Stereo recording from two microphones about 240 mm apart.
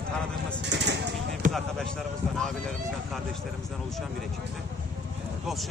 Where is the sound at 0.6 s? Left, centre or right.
Right.